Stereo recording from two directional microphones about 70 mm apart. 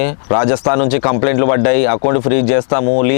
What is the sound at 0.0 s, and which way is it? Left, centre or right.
Speech, left.